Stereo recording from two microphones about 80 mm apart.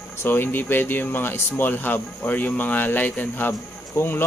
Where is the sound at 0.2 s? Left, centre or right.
Left.